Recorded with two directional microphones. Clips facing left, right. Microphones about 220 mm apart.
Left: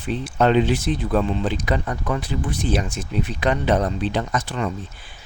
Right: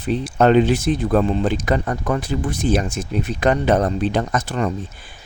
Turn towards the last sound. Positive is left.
turn(degrees=-45)  # may be behind; listen again after turning